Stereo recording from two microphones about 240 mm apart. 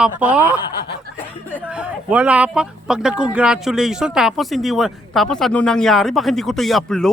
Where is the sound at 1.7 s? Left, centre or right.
Centre.